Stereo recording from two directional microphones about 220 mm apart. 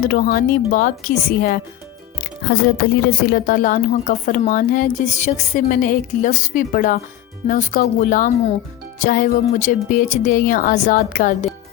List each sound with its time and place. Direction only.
0.1 s a woman's voice: 40° left (ahead or behind)